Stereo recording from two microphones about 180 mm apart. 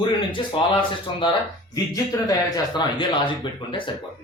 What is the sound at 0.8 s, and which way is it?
Speech, 30° left (ahead or behind).